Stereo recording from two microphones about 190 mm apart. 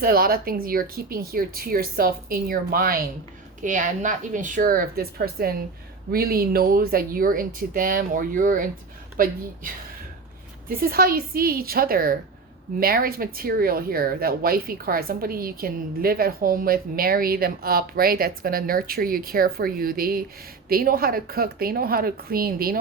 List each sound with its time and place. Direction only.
0.0 s speech: 50° right (ahead or behind)
10.7 s speech: 50° right (ahead or behind)